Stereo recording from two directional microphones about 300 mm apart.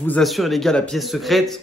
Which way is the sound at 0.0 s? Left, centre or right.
Centre.